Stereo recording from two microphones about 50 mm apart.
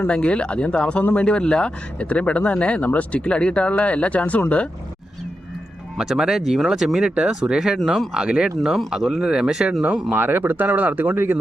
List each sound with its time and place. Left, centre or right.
0.1 s speech: left
6.0 s speech: centre
7.9 s speech: centre
8.1 s speech: centre
10.2 s speech: right